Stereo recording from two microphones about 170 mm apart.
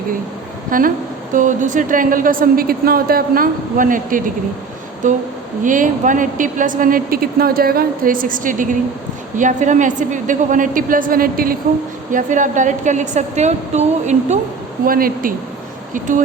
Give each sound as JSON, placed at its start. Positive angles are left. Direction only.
{"t": 0.7, "sound": "a woman's voice", "side_deg": -55}
{"t": 14.8, "sound": "speech", "side_deg": -55}